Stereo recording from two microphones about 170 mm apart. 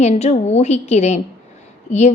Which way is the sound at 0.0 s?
40° left (ahead or behind).